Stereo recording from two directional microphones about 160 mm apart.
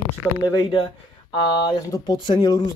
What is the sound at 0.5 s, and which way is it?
Speech, 30° left (ahead or behind).